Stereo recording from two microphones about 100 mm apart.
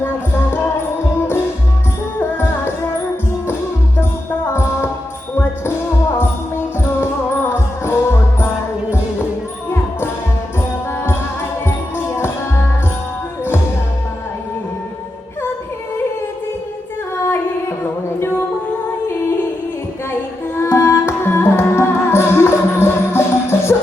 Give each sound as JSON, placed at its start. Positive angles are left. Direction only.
{"t": 2.1, "sound": "music", "side_deg": 25}
{"t": 4.4, "sound": "music", "side_deg": 25}
{"t": 6.1, "sound": "music", "side_deg": 25}
{"t": 17.2, "sound": "a sound", "side_deg": 25}
{"t": 20.6, "sound": "music", "side_deg": 25}